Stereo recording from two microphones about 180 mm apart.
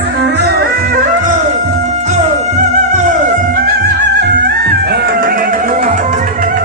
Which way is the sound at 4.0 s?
70° right (ahead or behind).